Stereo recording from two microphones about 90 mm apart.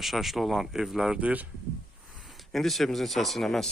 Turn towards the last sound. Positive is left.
turn(degrees=5)  # may be behind; listen again after turning